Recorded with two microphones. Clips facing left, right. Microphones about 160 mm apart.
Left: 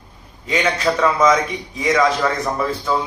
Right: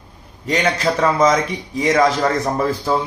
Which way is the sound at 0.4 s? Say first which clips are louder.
Right 1 dB; 40° right (ahead or behind).